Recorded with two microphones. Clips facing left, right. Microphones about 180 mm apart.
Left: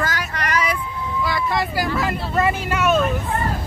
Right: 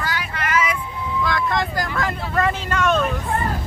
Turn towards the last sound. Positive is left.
turn(degrees=5)  # may be behind; listen again after turning